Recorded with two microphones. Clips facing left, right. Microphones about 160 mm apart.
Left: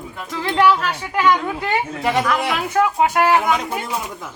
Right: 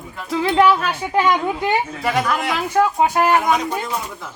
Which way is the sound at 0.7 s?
20° right (ahead or behind).